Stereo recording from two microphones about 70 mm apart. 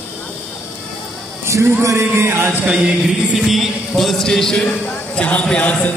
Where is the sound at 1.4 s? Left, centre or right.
Right.